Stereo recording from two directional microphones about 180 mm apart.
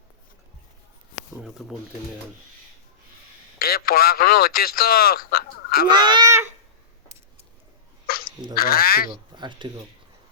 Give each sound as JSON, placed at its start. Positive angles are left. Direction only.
{"t": 1.4, "sound": "speech", "side_deg": 0}
{"t": 3.6, "sound": "speech", "side_deg": 55}
{"t": 5.9, "sound": "speech", "side_deg": -25}
{"t": 8.0, "sound": "a sound", "side_deg": 55}
{"t": 8.5, "sound": "speech", "side_deg": 55}
{"t": 9.3, "sound": "speech", "side_deg": -25}